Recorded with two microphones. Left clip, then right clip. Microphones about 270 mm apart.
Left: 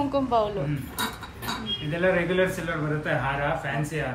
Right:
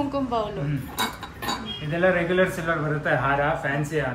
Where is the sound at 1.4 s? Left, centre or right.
Right.